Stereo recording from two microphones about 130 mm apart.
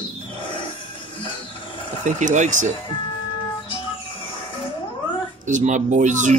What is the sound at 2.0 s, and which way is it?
Speech, 70° right (ahead or behind).